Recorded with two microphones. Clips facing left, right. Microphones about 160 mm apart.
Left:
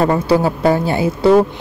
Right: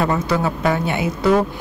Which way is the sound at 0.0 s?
35° left (ahead or behind).